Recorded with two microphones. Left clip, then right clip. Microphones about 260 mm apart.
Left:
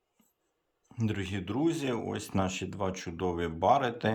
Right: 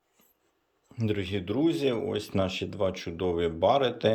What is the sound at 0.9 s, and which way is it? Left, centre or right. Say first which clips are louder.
Speech: right 5 dB; centre.